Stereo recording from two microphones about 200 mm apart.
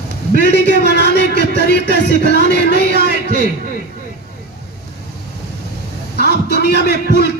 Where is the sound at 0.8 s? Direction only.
55° left (ahead or behind).